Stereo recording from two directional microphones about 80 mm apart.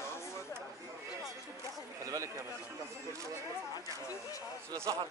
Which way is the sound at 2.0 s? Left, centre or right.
Right.